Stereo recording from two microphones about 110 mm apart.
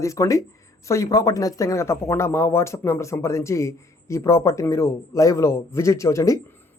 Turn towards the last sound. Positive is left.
turn(degrees=25)  # may be behind; listen again after turning